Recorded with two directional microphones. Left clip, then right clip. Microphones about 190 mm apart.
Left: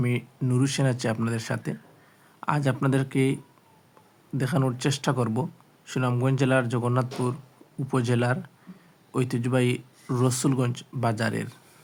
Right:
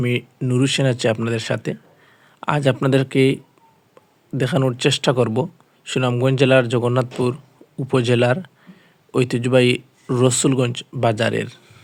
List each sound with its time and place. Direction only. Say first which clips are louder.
0.0 s speech: right 7 dB; 15° right (ahead or behind)